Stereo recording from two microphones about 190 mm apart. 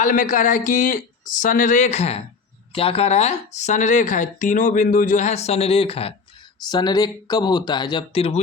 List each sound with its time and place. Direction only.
0.0 s speech: 45° left (ahead or behind)